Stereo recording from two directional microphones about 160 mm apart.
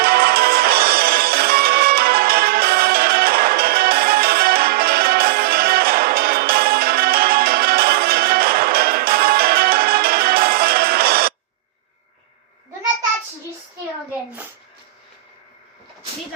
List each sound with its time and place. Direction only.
0.0 s music: 70° right (ahead or behind)